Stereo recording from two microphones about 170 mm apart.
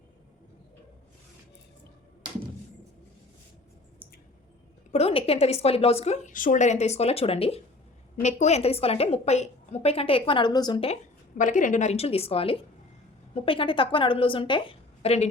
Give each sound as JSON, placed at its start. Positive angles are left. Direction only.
{"t": 4.9, "sound": "a woman's voice", "side_deg": 35}
{"t": 11.3, "sound": "a woman's voice", "side_deg": 50}